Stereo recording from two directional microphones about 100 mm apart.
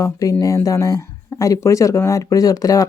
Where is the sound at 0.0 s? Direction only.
35° left (ahead or behind).